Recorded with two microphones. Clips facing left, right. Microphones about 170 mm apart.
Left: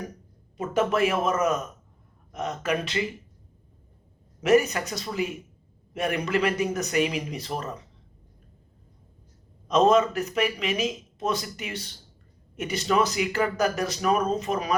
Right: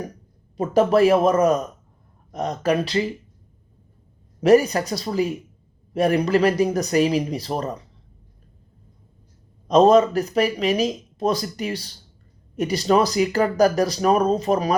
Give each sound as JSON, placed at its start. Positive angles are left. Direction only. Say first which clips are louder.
{"t": 0.5, "sound": "speech", "louder": "right 7 dB", "side_deg": -35}
{"t": 4.4, "sound": "speech", "louder": "right 5 dB", "side_deg": -35}
{"t": 9.6, "sound": "speech", "louder": "right 6 dB", "side_deg": -35}